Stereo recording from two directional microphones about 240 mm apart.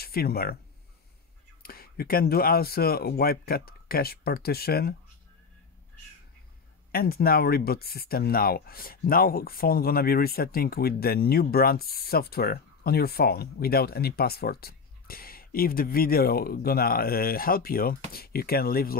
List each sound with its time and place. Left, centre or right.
0.0 s speech: left
1.6 s speech: left
6.9 s speech: left